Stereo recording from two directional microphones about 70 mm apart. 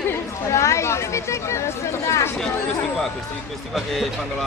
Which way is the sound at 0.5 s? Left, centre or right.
Left.